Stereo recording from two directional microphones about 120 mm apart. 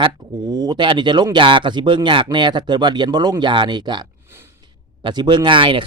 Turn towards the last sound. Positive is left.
turn(degrees=-45)  # may be behind; listen again after turning